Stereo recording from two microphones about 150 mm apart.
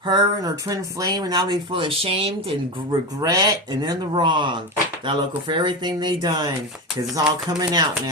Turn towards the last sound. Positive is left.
turn(degrees=-25)  # may be behind; listen again after turning